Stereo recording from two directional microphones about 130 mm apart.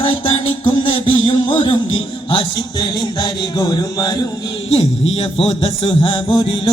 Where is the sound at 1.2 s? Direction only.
45° left (ahead or behind).